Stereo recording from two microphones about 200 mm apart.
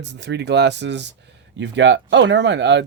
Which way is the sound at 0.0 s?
60° right (ahead or behind).